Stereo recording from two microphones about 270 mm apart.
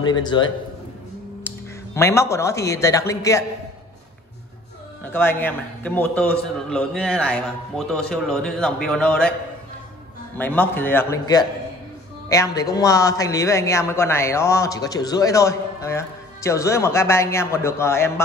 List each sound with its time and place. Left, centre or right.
0.0 s a man's voice: centre
2.0 s a man's voice: centre
5.0 s a man's voice: centre
10.3 s a man's voice: centre